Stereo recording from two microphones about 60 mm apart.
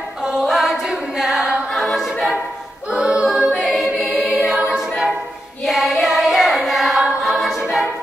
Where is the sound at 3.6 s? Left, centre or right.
Centre.